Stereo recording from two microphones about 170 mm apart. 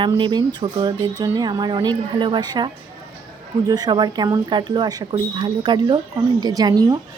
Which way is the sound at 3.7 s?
25° right (ahead or behind).